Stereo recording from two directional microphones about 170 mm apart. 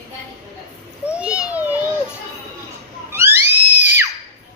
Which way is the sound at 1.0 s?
5° right (ahead or behind).